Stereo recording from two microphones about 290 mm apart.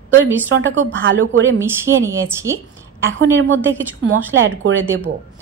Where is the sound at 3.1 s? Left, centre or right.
Right.